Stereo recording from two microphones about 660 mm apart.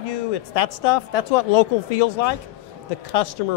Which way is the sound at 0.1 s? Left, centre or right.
Left.